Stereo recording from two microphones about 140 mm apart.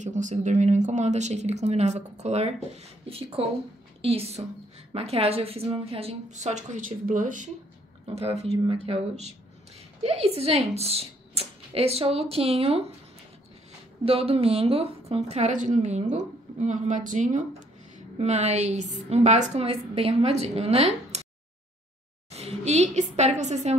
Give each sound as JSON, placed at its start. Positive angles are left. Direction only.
{"t": 0.0, "sound": "a woman's voice", "side_deg": -60}
{"t": 8.1, "sound": "a woman's voice", "side_deg": -50}
{"t": 14.0, "sound": "a woman's voice", "side_deg": -45}
{"t": 22.3, "sound": "a sound", "side_deg": -50}
{"t": 23.1, "sound": "a woman's voice", "side_deg": -55}